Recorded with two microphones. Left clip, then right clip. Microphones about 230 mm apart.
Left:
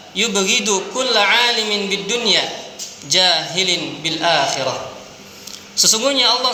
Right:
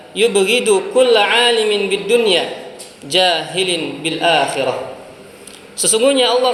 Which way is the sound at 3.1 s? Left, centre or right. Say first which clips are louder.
Right 1 dB; left.